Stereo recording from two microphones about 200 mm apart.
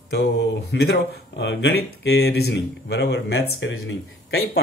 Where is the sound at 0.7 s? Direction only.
60° left (ahead or behind).